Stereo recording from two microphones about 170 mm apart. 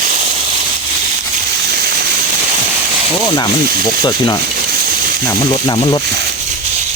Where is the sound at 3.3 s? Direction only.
25° left (ahead or behind).